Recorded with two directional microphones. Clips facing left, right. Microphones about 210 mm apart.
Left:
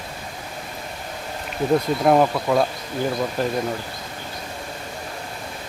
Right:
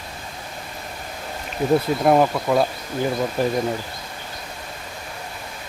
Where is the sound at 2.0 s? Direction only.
Centre (ahead or behind).